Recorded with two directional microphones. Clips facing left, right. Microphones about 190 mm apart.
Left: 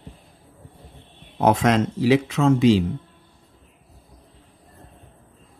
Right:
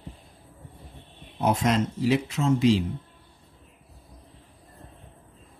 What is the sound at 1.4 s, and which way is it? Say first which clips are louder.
Speech: left 5 dB; 90° left.